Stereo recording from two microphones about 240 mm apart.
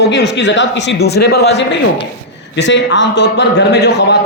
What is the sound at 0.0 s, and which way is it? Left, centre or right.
A man's voice, left.